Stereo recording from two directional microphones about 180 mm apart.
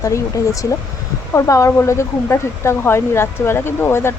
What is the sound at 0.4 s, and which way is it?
Speech, 20° left (ahead or behind).